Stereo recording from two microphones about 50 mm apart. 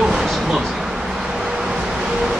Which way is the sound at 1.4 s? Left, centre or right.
Centre.